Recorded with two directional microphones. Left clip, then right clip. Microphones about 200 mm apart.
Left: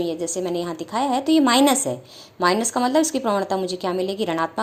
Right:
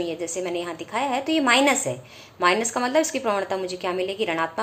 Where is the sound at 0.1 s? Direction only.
35° left (ahead or behind).